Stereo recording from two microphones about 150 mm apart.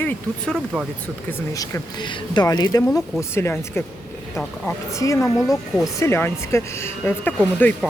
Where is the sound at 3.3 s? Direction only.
15° left (ahead or behind).